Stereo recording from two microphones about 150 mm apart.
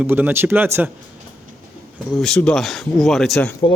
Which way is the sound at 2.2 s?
5° left (ahead or behind).